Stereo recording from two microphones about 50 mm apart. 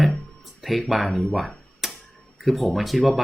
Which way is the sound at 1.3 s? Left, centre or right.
Centre.